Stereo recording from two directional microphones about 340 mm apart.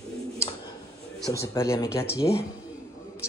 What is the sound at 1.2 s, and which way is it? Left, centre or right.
A man's voice, centre.